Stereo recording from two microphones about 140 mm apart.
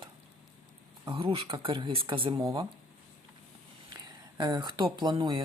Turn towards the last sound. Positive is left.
turn(degrees=-35)  # may be behind; listen again after turning